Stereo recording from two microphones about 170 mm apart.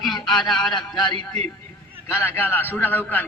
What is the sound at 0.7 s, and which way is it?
Speech, 25° left (ahead or behind).